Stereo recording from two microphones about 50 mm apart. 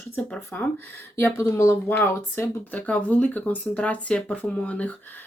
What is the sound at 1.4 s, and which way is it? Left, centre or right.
Speech, left.